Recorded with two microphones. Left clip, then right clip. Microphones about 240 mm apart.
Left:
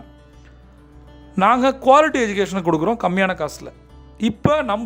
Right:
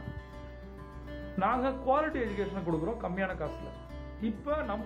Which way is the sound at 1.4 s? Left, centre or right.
Left.